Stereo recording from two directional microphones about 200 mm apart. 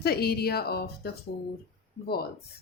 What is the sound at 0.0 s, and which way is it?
Speech, 50° left (ahead or behind).